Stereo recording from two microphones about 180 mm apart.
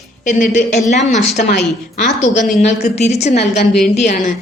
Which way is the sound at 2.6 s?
40° left (ahead or behind).